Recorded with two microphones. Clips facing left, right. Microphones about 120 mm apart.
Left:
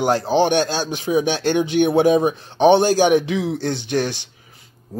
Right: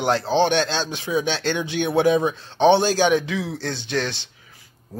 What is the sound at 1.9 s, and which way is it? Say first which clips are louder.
Speech: left 1 dB; 50° left (ahead or behind).